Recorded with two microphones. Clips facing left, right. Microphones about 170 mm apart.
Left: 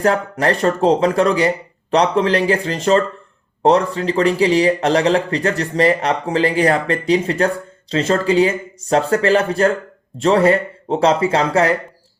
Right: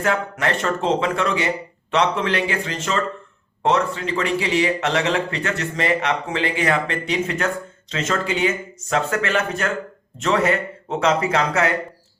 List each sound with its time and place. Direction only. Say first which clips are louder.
0.0 s speech: left 5 dB; 35° left (ahead or behind)